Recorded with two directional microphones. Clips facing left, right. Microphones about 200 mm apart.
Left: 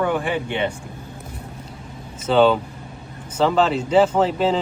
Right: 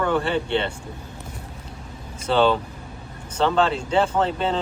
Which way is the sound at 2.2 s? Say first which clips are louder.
Left 3 dB; centre (ahead or behind).